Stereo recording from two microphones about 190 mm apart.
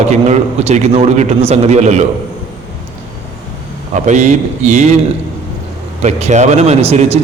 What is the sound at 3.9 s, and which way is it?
Speech, 40° right (ahead or behind).